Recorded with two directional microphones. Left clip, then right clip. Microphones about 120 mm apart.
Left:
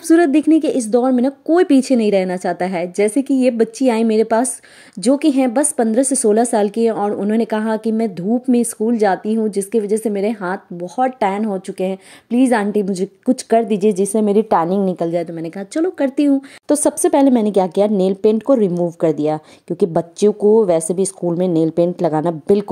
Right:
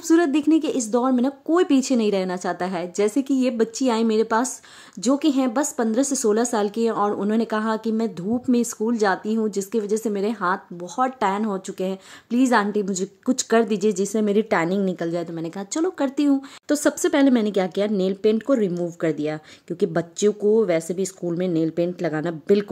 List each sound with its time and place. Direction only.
0.1 s a woman's voice: 30° left (ahead or behind)